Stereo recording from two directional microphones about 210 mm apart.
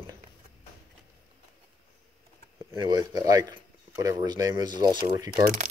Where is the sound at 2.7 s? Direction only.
20° right (ahead or behind).